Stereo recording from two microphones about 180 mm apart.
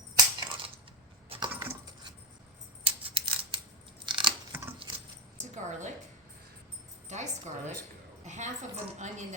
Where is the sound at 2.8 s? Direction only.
30° right (ahead or behind).